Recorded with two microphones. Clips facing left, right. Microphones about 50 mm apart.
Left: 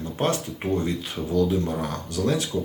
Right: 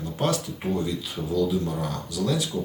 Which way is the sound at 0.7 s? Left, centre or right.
Left.